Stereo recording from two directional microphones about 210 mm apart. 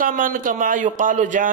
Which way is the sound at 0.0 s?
40° right (ahead or behind).